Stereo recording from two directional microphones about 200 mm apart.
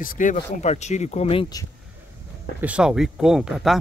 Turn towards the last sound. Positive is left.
turn(degrees=0)  # may be behind; listen again after turning